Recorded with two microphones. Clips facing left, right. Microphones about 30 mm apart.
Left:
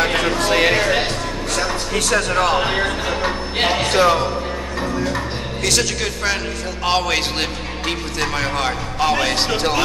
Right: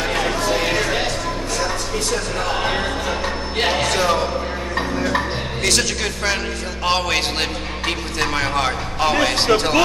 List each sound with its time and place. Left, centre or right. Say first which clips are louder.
0.0 s chatter: left 3 dB; left
0.4 s chatter: left 3 dB; left
0.7 s music: left 3 dB; left
1.5 s music: left 4 dB; left
2.6 s music: left 2 dB; centre
3.8 s speech: left 4 dB; centre
5.6 s speech: even; centre